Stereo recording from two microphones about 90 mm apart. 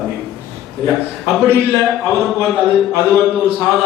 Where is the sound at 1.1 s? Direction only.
Centre (ahead or behind).